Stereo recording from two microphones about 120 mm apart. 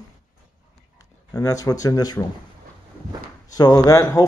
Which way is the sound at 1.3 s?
30° left (ahead or behind).